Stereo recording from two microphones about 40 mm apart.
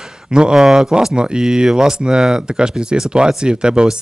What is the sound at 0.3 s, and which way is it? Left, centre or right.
Speech, right.